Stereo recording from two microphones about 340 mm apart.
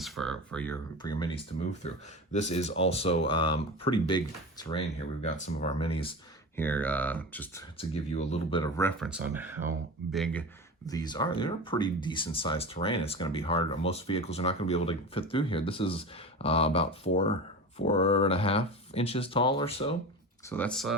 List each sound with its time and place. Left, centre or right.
0.0 s speech: centre
6.6 s speech: centre
7.8 s speech: centre
9.0 s speech: centre
10.8 s speech: centre
20.5 s speech: centre